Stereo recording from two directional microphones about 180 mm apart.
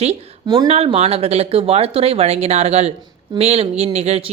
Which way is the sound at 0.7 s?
35° right (ahead or behind).